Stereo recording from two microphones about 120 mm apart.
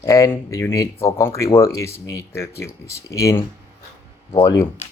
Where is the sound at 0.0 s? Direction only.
25° left (ahead or behind).